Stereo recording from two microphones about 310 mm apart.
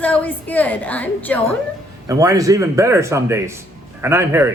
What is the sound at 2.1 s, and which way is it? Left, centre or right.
Speech, centre.